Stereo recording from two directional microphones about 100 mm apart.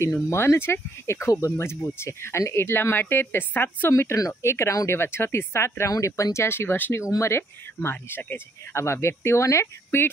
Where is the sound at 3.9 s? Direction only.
30° left (ahead or behind).